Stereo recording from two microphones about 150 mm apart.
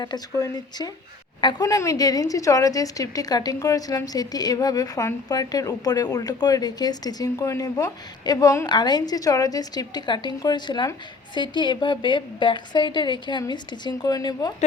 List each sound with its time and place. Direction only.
0.0 s a woman's voice: 25° left (ahead or behind)